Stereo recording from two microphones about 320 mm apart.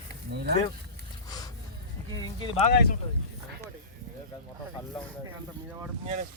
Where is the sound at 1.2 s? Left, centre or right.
Centre.